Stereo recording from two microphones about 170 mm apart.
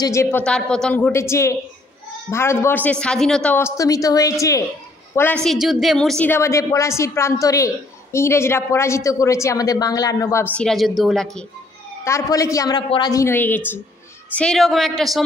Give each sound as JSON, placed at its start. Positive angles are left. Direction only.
{"t": 0.0, "sound": "a woman's voice", "side_deg": 15}
{"t": 12.0, "sound": "a woman's voice", "side_deg": 20}